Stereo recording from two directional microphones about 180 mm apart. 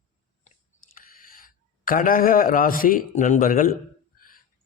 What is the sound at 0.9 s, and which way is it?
Speech, 50° left (ahead or behind).